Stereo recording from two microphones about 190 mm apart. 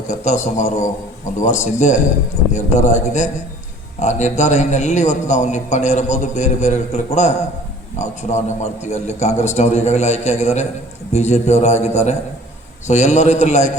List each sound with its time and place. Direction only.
0.1 s a man's voice: 40° left (ahead or behind)